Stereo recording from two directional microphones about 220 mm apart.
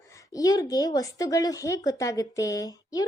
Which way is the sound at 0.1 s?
15° left (ahead or behind).